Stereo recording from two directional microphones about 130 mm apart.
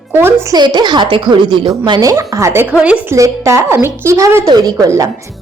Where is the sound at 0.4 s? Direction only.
35° right (ahead or behind).